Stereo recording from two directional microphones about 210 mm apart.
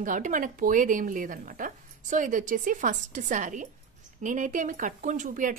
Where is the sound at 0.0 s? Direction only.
40° right (ahead or behind).